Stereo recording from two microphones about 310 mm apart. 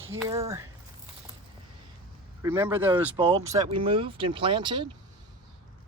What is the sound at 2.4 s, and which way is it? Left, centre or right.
Speech, centre.